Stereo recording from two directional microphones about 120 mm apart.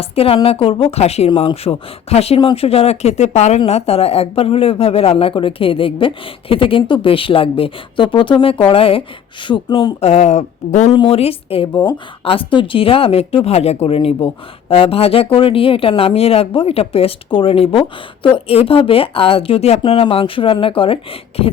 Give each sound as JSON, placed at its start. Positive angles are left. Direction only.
{"t": 0.0, "sound": "speech", "side_deg": 55}
{"t": 9.5, "sound": "speech", "side_deg": 40}
{"t": 10.0, "sound": "speech", "side_deg": 60}
{"t": 10.9, "sound": "speech", "side_deg": 50}